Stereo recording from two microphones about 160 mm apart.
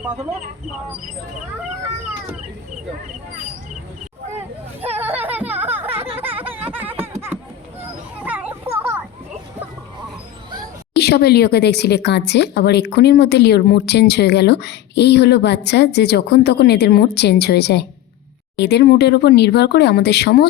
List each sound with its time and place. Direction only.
5.0 s a sound: 10° right (ahead or behind)
8.2 s children playing: 10° right (ahead or behind)
10.9 s speech: 90° left